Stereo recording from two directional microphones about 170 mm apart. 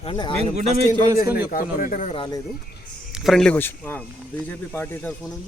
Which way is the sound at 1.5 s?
55° left (ahead or behind).